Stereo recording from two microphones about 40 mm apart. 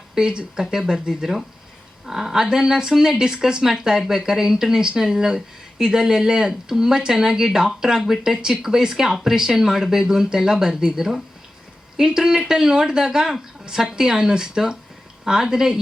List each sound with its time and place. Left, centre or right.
0.1 s speech: centre